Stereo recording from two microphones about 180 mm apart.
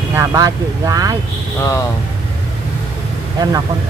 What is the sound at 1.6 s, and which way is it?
Speech, 15° left (ahead or behind).